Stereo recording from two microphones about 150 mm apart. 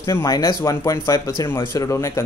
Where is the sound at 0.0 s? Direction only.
20° left (ahead or behind).